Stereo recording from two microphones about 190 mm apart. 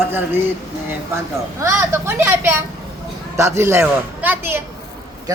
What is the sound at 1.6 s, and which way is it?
A man's voice, 15° right (ahead or behind).